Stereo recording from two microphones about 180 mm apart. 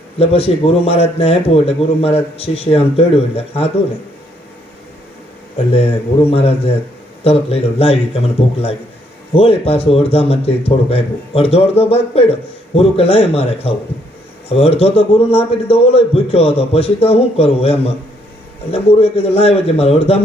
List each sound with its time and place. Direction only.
0.2 s speech: 35° left (ahead or behind)
5.7 s speech: 35° left (ahead or behind)
9.3 s speech: 30° left (ahead or behind)